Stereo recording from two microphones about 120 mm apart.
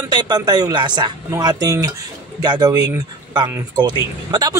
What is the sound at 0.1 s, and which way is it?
A man's voice, 35° right (ahead or behind).